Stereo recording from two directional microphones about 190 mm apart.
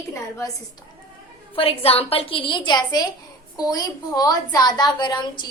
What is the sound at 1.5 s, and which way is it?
A woman's voice, 30° left (ahead or behind).